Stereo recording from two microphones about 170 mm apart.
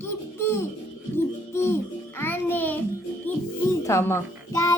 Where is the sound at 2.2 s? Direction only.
10° left (ahead or behind).